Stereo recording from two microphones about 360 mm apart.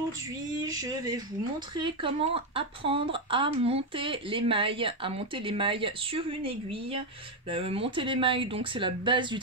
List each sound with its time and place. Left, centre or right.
0.7 s speech: centre